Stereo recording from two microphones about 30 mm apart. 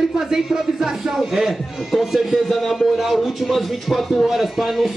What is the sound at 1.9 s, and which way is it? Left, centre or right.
Speech, centre.